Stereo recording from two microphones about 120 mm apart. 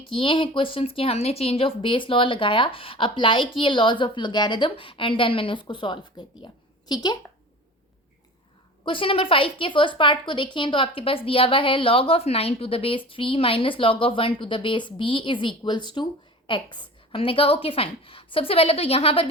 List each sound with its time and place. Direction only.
0.2 s speech: 45° left (ahead or behind)
8.8 s speech: 45° left (ahead or behind)